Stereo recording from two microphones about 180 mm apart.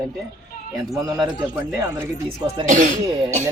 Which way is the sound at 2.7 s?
45° right (ahead or behind).